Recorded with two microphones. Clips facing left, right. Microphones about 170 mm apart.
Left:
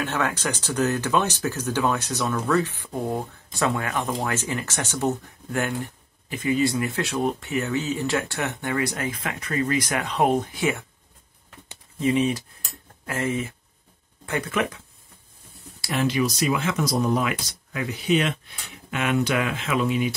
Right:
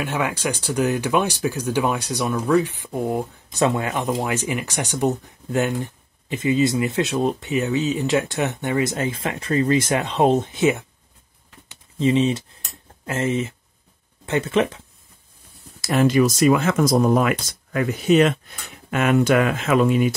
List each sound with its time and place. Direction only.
0.0 s speech: 10° right (ahead or behind)
12.0 s speech: 25° right (ahead or behind)
15.8 s speech: 45° right (ahead or behind)